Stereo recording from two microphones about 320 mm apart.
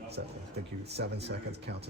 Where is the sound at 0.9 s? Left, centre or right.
Right.